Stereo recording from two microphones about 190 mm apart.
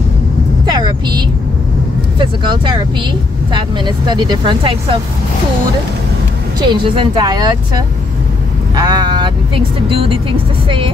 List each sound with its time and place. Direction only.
0.7 s vehicle: 20° right (ahead or behind)
2.1 s speech: 25° right (ahead or behind)
6.6 s speech: 25° right (ahead or behind)